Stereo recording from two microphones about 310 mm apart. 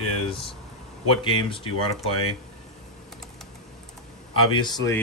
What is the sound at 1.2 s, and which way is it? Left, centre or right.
Speech, centre.